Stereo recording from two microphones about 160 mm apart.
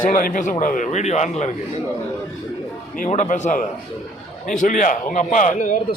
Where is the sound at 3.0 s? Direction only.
50° left (ahead or behind).